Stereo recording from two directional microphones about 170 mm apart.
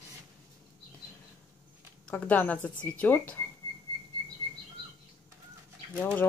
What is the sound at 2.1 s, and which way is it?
Speech, 10° left (ahead or behind).